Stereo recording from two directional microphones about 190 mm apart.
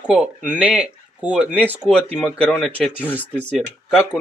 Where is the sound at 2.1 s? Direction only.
5° left (ahead or behind).